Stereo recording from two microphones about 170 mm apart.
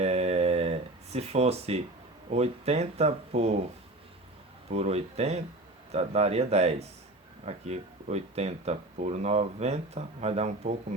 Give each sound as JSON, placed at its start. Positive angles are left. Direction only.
{"t": 0.0, "sound": "a sound", "side_deg": -40}
{"t": 2.3, "sound": "speech", "side_deg": -40}
{"t": 4.7, "sound": "speech", "side_deg": -35}